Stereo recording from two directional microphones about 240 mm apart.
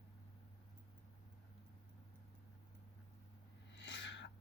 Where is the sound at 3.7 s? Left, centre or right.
Left.